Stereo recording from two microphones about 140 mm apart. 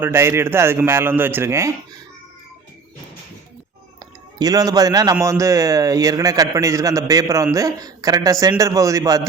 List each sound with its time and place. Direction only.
0.0 s a man's voice: 20° right (ahead or behind)
4.4 s a man's voice: 25° right (ahead or behind)